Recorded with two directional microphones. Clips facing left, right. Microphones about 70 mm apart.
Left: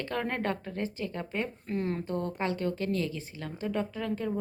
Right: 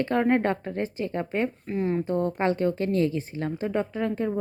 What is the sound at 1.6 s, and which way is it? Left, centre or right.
Speech, centre.